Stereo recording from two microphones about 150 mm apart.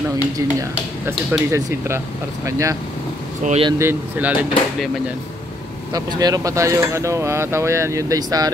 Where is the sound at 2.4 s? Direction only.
20° right (ahead or behind).